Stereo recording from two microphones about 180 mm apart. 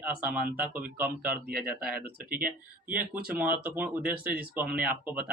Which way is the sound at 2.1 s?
50° right (ahead or behind).